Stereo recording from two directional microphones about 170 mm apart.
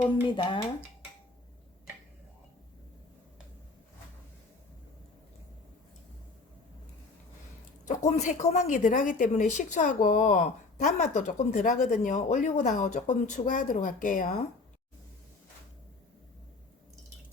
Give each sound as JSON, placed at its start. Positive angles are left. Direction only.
{"t": 0.3, "sound": "speech", "side_deg": 30}
{"t": 7.9, "sound": "a woman's voice", "side_deg": 45}